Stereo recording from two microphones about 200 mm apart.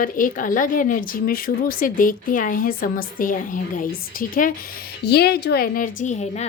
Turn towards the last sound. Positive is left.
turn(degrees=35)  # may be behind; listen again after turning